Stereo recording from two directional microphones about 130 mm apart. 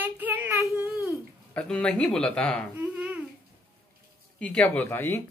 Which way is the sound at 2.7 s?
15° right (ahead or behind).